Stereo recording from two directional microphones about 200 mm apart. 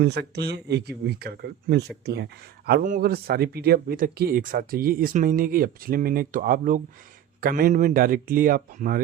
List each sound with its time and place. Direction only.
0.0 s speech: 55° right (ahead or behind)